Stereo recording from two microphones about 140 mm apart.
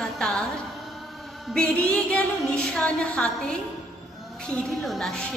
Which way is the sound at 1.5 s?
5° left (ahead or behind).